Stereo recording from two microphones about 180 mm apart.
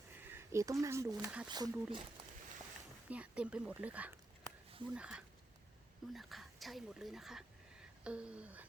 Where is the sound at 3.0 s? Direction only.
5° right (ahead or behind).